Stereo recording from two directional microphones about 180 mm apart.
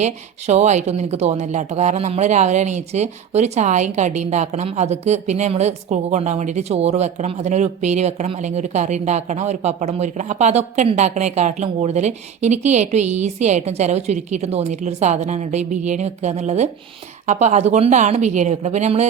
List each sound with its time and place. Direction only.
0.0 s speech: 40° right (ahead or behind)